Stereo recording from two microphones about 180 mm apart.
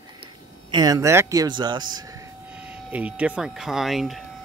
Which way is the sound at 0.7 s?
20° right (ahead or behind).